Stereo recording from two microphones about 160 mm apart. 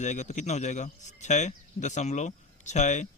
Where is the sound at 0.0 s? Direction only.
45° left (ahead or behind).